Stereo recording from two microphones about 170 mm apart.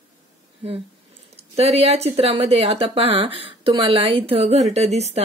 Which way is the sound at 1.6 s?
35° right (ahead or behind).